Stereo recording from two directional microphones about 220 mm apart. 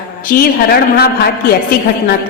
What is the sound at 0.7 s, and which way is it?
Speech, 45° left (ahead or behind).